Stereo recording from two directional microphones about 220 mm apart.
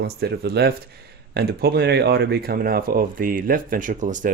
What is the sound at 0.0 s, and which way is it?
Speech, 50° right (ahead or behind).